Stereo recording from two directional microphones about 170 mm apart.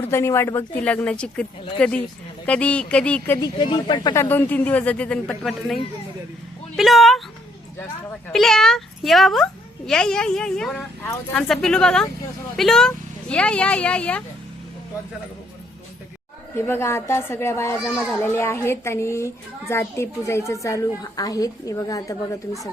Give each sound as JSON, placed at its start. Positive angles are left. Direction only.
{"t": 0.0, "sound": "a child's voice", "side_deg": 15}
{"t": 3.3, "sound": "speech", "side_deg": 25}
{"t": 4.1, "sound": "a child's voice", "side_deg": 15}
{"t": 6.7, "sound": "a sound", "side_deg": 0}
{"t": 8.3, "sound": "speech", "side_deg": 0}
{"t": 16.6, "sound": "a child's voice", "side_deg": 15}
{"t": 17.9, "sound": "speech", "side_deg": -5}
{"t": 18.2, "sound": "a child's voice", "side_deg": 15}